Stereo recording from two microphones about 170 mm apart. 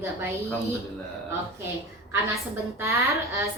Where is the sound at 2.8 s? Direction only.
15° right (ahead or behind).